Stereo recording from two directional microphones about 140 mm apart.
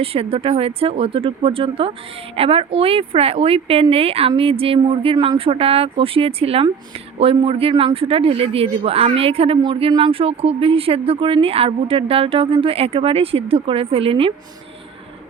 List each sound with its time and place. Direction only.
0.0 s speech: 45° right (ahead or behind)